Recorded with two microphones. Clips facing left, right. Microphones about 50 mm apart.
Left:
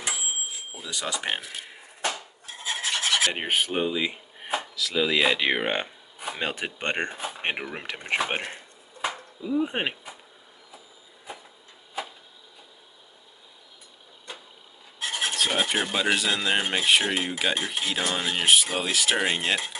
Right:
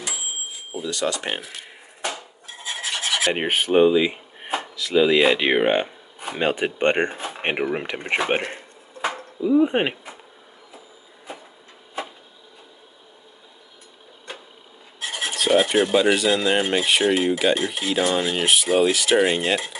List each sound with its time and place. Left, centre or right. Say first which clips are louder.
0.8 s cutlery: right 5 dB; centre
3.4 s speech: right 3 dB; centre
3.7 s speech: right 10 dB; right
4.5 s speech: right 3 dB; centre
9.4 s speech: right 8 dB; centre
15.0 s filing: right 1 dB; centre